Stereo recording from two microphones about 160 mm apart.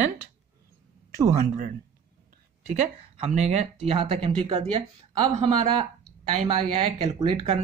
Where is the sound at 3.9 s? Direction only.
40° right (ahead or behind).